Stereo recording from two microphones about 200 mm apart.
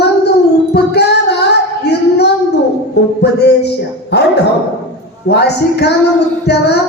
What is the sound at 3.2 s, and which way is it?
A man's voice, 55° left (ahead or behind).